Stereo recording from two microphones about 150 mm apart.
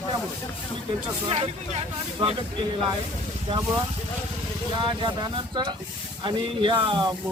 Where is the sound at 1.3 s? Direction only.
45° right (ahead or behind).